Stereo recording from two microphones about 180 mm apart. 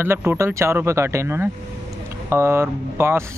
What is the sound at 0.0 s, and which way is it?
Speech, 10° right (ahead or behind).